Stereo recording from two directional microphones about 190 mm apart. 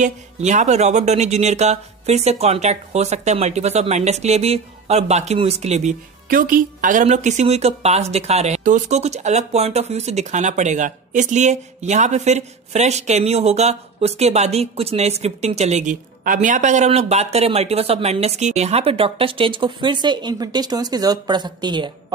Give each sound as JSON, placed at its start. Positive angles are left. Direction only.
{"t": 0.0, "sound": "speech", "side_deg": -40}